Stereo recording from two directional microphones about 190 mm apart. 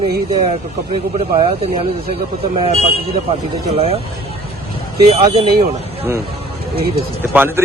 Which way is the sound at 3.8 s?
30° right (ahead or behind).